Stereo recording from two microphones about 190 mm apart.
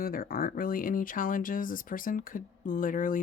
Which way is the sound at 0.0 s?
50° left (ahead or behind).